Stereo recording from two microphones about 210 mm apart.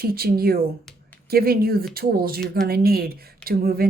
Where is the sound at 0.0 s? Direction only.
45° right (ahead or behind).